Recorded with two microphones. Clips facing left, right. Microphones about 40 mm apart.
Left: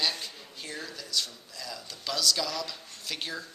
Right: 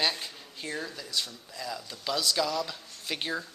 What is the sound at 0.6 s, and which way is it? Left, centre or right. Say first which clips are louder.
Speech: right 4 dB; centre.